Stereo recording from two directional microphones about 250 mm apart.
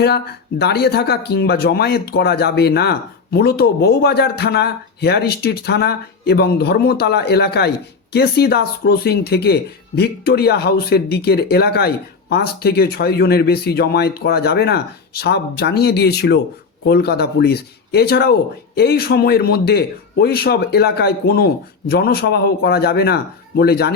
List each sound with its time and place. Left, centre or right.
0.0 s speech: left